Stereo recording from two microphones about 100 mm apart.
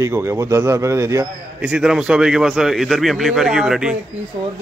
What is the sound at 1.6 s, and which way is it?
A man's voice, 5° right (ahead or behind).